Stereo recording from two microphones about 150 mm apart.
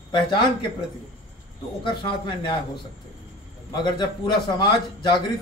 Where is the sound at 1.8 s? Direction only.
35° left (ahead or behind).